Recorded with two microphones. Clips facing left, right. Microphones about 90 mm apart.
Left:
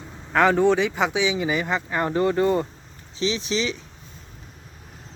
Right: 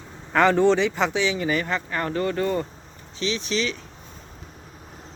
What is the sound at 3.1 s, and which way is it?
Speech, 30° left (ahead or behind).